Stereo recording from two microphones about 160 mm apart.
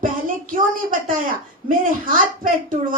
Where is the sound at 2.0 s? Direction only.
55° right (ahead or behind).